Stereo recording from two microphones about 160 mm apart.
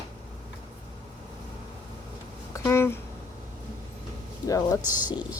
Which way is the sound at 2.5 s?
15° left (ahead or behind).